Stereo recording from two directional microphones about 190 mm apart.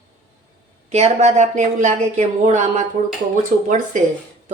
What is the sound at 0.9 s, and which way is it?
Speech, 35° right (ahead or behind).